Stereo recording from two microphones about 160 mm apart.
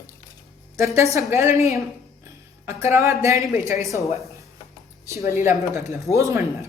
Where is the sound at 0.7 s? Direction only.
20° right (ahead or behind).